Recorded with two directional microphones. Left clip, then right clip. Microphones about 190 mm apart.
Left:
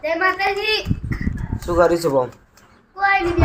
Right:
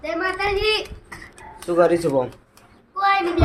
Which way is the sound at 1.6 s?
5° left (ahead or behind).